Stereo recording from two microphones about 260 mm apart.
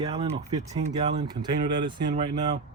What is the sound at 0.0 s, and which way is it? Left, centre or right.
Speech, centre.